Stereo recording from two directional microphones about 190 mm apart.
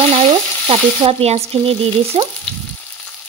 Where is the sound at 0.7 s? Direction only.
30° right (ahead or behind).